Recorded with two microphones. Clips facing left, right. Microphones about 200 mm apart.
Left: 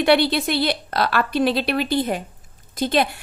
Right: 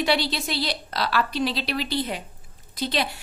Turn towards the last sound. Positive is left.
turn(degrees=50)  # may be behind; listen again after turning